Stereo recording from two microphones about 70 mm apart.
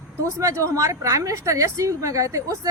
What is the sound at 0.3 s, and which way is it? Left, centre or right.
A woman's voice, right.